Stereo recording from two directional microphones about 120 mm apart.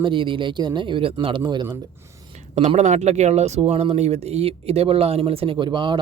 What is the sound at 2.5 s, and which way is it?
Speech, 75° right (ahead or behind).